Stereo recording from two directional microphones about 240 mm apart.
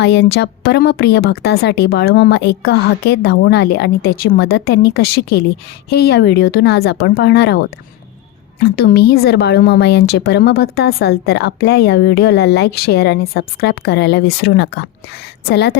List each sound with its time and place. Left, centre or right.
0.0 s a woman's voice: left